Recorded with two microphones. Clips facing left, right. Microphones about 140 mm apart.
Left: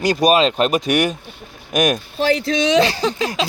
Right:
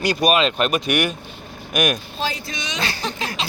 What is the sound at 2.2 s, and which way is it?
Speech, 75° left (ahead or behind).